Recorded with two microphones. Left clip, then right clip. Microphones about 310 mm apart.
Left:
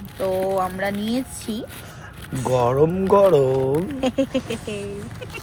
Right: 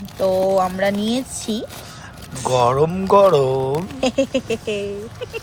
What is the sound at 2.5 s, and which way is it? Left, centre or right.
Speech, centre.